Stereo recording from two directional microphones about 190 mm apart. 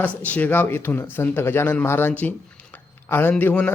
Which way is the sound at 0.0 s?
10° left (ahead or behind).